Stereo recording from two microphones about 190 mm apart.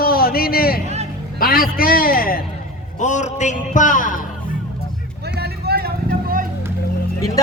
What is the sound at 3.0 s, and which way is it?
Music, 40° left (ahead or behind).